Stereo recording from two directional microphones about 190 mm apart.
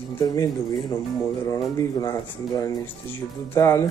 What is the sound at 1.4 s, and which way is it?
Speech, 20° left (ahead or behind).